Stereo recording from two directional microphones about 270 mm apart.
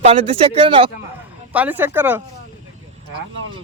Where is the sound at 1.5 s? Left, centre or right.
Centre.